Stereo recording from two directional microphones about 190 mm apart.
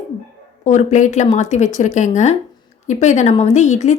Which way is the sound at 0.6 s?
40° left (ahead or behind).